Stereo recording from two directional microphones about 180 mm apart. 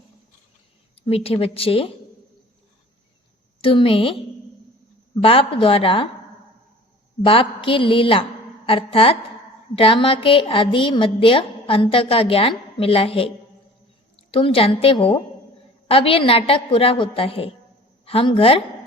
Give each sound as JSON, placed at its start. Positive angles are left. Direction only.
{"t": 1.0, "sound": "a woman's voice", "side_deg": 30}
{"t": 3.6, "sound": "a woman's voice", "side_deg": 30}
{"t": 5.2, "sound": "a woman's voice", "side_deg": 30}
{"t": 7.3, "sound": "a woman's voice", "side_deg": 30}